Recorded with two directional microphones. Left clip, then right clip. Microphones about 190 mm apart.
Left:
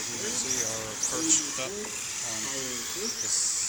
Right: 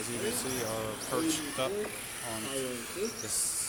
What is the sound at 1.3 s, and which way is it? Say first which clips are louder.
Speech: left 4 dB; 15° right (ahead or behind).